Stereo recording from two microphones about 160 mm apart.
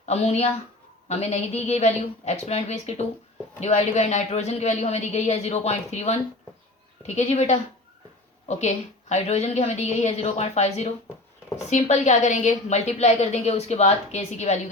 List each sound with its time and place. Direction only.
0.0 s a woman's voice: 40° left (ahead or behind)
7.2 s a woman's voice: 45° left (ahead or behind)